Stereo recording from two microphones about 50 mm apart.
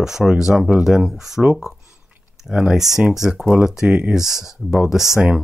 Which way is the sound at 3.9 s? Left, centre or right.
Right.